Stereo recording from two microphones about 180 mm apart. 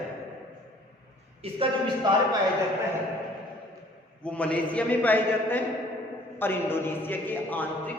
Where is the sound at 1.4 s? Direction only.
30° right (ahead or behind).